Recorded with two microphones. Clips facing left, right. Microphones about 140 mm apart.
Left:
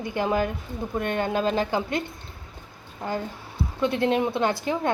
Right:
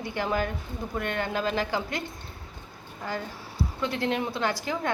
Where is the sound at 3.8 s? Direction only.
20° left (ahead or behind).